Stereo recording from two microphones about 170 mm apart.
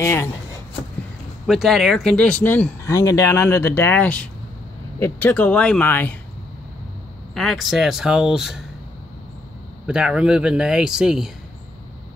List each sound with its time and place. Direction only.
0.0 s speech: 15° left (ahead or behind)
1.5 s speech: centre (ahead or behind)
7.3 s speech: centre (ahead or behind)
9.8 s speech: 5° right (ahead or behind)